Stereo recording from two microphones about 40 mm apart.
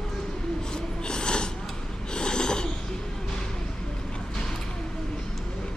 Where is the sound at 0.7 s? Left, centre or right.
Left.